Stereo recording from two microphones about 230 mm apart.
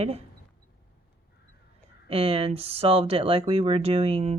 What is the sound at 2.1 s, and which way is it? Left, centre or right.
Speech, right.